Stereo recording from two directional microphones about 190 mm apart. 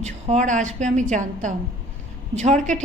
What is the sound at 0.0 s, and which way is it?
A woman's voice, 40° right (ahead or behind).